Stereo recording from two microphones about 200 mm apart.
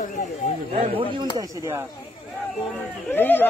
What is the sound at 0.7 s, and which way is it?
Speech, 30° right (ahead or behind).